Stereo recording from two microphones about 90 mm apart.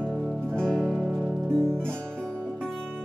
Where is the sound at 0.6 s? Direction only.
10° left (ahead or behind).